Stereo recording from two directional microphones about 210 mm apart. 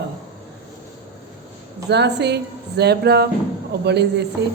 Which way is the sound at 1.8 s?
55° right (ahead or behind).